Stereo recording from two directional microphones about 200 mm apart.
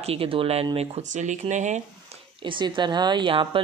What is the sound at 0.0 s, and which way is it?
Speech, 30° right (ahead or behind).